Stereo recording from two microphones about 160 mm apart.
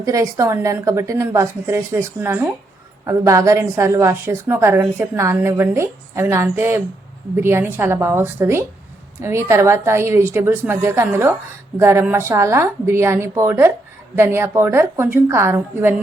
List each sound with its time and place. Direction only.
0.0 s a woman's voice: 20° right (ahead or behind)